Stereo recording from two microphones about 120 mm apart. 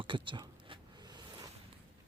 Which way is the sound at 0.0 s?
45° right (ahead or behind).